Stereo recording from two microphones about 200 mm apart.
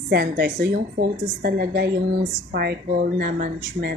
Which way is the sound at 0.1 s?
50° right (ahead or behind).